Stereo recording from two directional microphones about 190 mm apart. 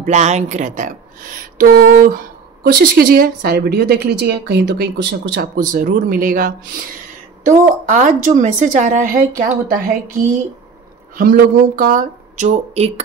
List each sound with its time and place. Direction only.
0.0 s speech: 40° right (ahead or behind); by 5.5 s 60° right (ahead or behind)
5.6 s a woman's voice: 45° right (ahead or behind)
11.1 s speech: 50° right (ahead or behind); by 13.0 s 35° right (ahead or behind)